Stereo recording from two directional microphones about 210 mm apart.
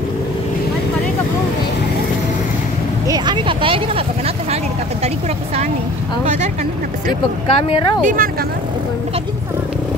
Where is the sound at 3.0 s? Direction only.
20° right (ahead or behind).